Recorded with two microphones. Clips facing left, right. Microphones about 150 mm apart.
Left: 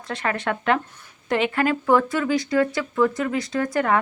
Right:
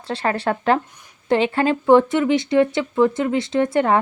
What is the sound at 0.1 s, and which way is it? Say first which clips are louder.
Speech: right 4 dB; 30° right (ahead or behind).